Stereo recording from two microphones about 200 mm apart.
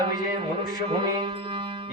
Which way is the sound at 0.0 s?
25° right (ahead or behind).